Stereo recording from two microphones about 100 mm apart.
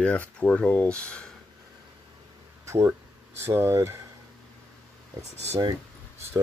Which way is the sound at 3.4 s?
25° right (ahead or behind).